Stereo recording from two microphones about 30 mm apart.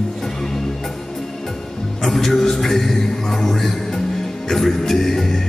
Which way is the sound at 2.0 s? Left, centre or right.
Centre.